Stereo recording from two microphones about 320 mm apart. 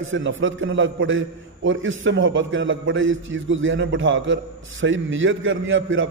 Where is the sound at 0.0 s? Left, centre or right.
Right.